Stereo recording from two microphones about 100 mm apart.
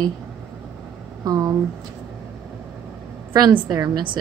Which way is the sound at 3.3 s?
45° right (ahead or behind).